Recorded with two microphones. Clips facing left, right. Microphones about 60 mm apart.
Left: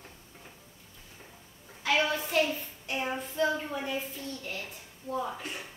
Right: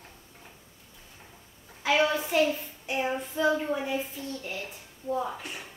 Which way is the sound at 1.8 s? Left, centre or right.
Centre.